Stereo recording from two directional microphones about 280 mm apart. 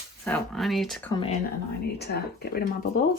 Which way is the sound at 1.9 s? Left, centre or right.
Left.